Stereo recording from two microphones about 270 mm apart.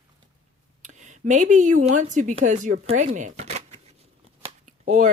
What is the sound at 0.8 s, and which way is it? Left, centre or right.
A woman's voice, right.